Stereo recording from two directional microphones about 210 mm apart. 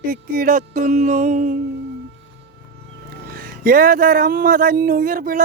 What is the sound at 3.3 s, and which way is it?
Speech, 45° right (ahead or behind).